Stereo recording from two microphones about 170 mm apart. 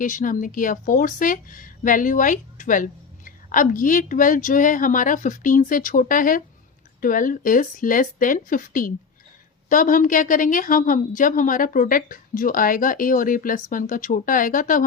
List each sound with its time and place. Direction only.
0.0 s speech: 50° left (ahead or behind)